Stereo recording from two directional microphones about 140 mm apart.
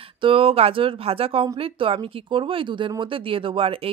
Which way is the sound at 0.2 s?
40° right (ahead or behind).